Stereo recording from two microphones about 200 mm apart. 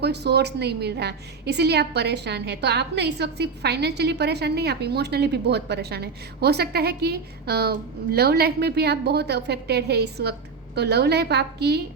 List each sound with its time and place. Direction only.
0.0 s a woman's voice: 55° right (ahead or behind)